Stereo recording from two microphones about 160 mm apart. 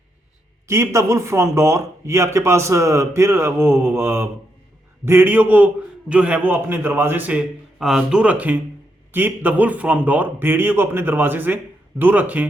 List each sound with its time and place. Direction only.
0.7 s speech: 15° right (ahead or behind)